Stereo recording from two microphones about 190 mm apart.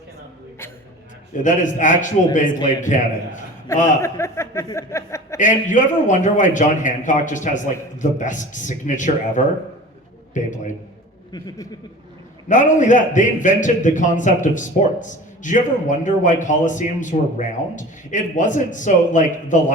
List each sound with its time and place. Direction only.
1.4 s a man's voice: 40° left (ahead or behind)
3.7 s speech: 15° left (ahead or behind)
5.4 s a man's voice: 40° left (ahead or behind)
11.3 s speech: 20° left (ahead or behind)
12.5 s a man's voice: 40° left (ahead or behind)